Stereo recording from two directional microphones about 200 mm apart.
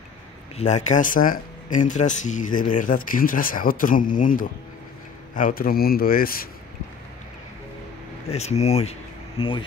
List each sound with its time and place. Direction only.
0.6 s a man's voice: 35° left (ahead or behind)
8.3 s speech: 35° left (ahead or behind)